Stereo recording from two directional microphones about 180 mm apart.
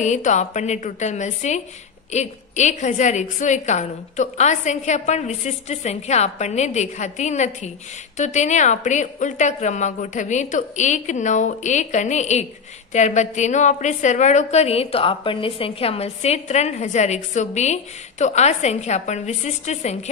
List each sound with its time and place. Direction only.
0.0 s a woman's voice: 40° left (ahead or behind)